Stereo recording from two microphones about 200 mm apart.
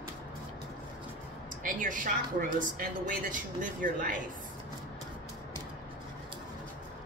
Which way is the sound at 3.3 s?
40° right (ahead or behind).